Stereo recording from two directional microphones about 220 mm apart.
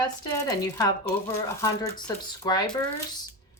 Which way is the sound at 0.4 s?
15° left (ahead or behind).